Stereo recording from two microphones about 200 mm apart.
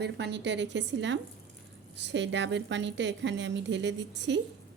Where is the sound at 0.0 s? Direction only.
60° right (ahead or behind).